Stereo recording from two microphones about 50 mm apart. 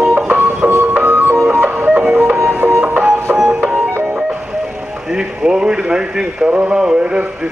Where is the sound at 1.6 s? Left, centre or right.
Right.